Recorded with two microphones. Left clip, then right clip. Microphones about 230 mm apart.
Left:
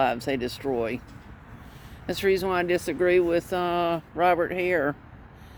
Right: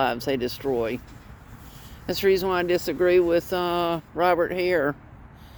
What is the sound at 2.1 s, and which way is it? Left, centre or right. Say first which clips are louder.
Speech: right 2 dB; right.